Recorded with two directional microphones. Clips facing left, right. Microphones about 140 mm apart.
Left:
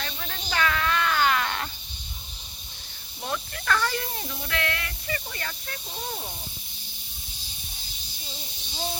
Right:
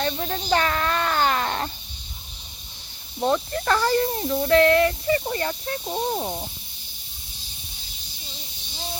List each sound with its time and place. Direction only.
0.0 s baby cry: 35° right (ahead or behind)
3.2 s speech: 35° right (ahead or behind)
5.8 s speech: 50° right (ahead or behind)